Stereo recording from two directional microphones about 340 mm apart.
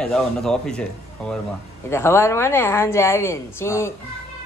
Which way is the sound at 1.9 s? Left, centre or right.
Centre.